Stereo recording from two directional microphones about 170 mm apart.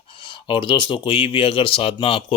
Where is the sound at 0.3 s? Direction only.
30° left (ahead or behind).